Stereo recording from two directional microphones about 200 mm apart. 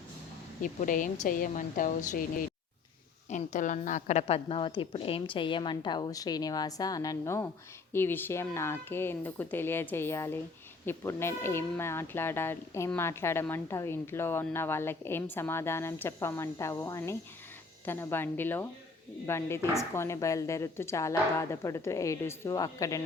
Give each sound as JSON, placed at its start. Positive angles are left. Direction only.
{"t": 0.6, "sound": "a woman's voice", "side_deg": 40}
{"t": 3.2, "sound": "a woman's voice", "side_deg": 35}